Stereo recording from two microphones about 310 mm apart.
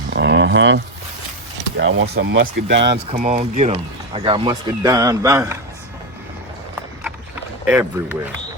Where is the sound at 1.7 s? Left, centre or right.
Right.